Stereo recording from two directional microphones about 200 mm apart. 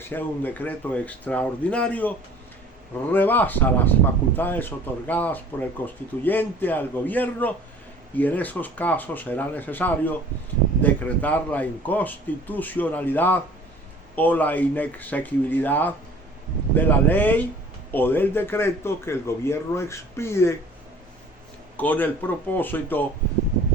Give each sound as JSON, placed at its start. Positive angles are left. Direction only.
{"t": 0.0, "sound": "speech", "side_deg": 10}
{"t": 21.8, "sound": "speech", "side_deg": 10}